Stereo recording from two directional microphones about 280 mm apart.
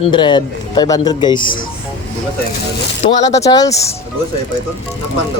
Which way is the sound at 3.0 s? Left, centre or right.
Left.